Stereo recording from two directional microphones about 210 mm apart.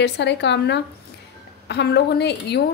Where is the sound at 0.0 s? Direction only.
55° left (ahead or behind).